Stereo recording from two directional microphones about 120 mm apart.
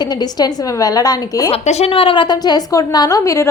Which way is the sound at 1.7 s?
55° left (ahead or behind).